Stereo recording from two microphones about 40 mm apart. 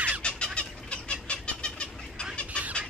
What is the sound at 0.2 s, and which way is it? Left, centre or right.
Fowl, left.